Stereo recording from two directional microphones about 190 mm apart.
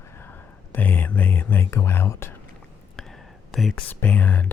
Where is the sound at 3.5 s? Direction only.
5° left (ahead or behind).